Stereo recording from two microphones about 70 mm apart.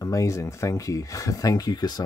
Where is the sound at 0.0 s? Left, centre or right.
Left.